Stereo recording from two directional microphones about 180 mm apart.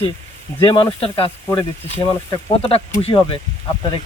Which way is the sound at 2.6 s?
30° left (ahead or behind).